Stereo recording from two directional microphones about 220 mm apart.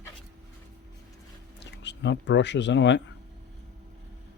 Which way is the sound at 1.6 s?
55° left (ahead or behind).